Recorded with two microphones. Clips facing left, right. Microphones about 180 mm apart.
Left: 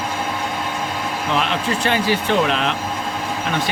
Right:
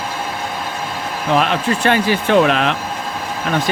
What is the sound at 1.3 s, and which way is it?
Speech, 55° right (ahead or behind).